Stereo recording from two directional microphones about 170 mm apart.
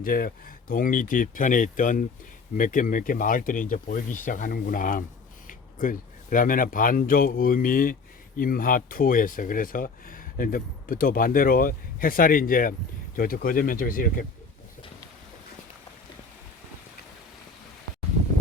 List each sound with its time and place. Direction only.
0.0 s speech: 55° left (ahead or behind)